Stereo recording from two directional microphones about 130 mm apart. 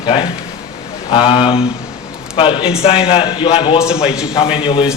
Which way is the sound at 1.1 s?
40° left (ahead or behind).